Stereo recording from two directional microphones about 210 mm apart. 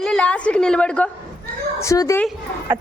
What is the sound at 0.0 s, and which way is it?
A woman's voice, 5° left (ahead or behind).